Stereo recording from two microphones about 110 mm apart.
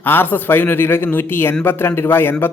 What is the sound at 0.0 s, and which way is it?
Speech, 20° left (ahead or behind).